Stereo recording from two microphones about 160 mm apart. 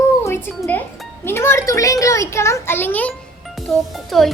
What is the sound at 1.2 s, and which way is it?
A child's voice, 15° left (ahead or behind).